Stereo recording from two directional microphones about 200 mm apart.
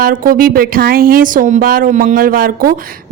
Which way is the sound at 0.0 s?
45° right (ahead or behind).